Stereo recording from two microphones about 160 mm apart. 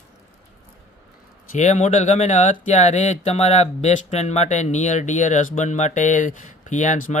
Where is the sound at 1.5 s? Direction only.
45° left (ahead or behind).